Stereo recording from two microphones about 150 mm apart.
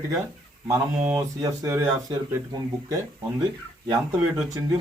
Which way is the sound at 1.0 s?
15° right (ahead or behind).